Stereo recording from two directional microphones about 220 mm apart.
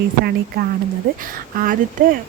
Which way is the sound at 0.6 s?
45° right (ahead or behind).